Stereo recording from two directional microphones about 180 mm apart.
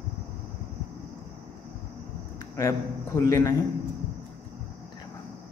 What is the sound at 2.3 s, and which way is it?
A man's voice, 20° left (ahead or behind).